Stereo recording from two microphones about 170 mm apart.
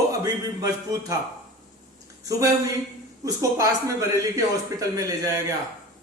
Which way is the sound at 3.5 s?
20° right (ahead or behind).